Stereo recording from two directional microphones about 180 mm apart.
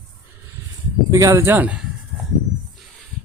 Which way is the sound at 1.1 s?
15° right (ahead or behind).